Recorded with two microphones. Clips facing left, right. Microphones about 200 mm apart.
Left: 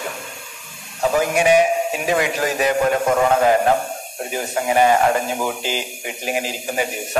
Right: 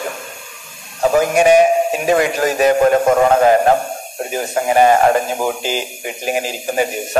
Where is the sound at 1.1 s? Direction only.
45° right (ahead or behind).